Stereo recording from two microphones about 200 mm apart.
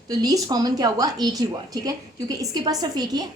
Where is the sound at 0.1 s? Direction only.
15° right (ahead or behind).